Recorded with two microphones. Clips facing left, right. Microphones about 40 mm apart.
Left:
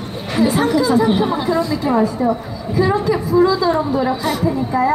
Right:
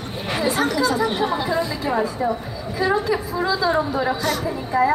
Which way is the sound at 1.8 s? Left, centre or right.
Centre.